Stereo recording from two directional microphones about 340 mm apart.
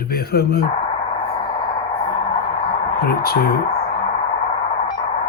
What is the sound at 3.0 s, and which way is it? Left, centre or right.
Speech, left.